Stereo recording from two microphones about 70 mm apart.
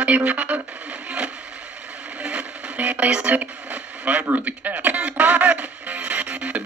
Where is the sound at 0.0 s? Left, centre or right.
Right.